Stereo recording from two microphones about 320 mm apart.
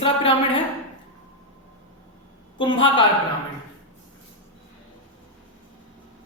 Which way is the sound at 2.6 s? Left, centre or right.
Centre.